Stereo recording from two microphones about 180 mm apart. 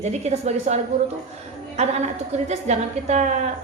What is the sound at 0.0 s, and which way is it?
A woman's voice, 40° right (ahead or behind).